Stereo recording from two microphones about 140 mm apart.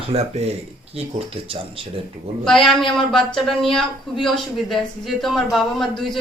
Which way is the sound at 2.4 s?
Centre (ahead or behind).